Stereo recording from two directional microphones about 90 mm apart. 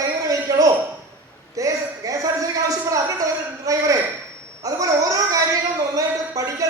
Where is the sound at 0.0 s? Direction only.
40° right (ahead or behind).